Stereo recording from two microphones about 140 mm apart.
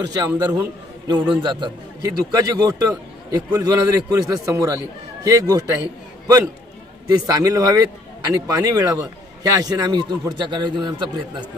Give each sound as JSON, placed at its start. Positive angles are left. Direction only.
{"t": 0.0, "sound": "a man's voice", "side_deg": -30}
{"t": 7.2, "sound": "a man's voice", "side_deg": -25}